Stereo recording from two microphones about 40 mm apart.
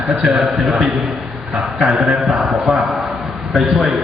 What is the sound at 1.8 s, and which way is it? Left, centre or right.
Mantra, centre.